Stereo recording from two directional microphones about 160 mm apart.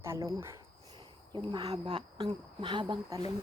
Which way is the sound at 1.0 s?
30° right (ahead or behind).